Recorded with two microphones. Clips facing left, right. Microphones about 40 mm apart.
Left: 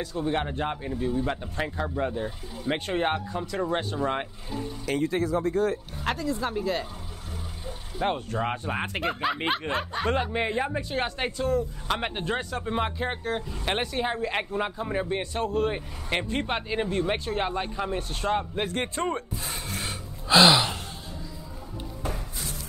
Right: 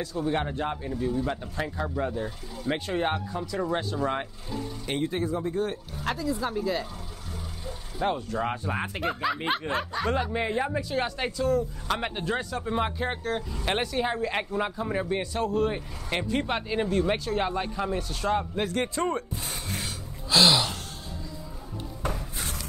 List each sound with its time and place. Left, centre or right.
0.0 s speech: left
0.3 s a man's voice: left
3.9 s speech: left
5.1 s speech: left
6.1 s a man's voice: left
8.0 s speech: left
8.4 s speech: left
8.8 s a man's voice: left
12.6 s speech: left
15.3 s a man's voice: left
19.8 s gasp: left
20.3 s speech: left